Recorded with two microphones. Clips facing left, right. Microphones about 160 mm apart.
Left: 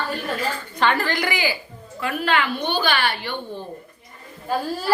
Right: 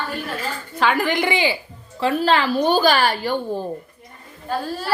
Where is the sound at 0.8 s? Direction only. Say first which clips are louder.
Right 2 dB; 10° right (ahead or behind); by 3.6 s 40° right (ahead or behind).